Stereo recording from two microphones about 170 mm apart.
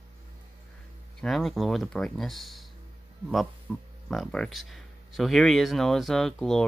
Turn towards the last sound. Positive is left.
turn(degrees=5)  # may be behind; listen again after turning